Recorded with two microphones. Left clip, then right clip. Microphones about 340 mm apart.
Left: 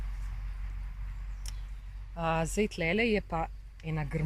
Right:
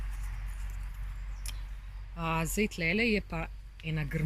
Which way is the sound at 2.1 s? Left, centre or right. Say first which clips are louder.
Left 2 dB; left.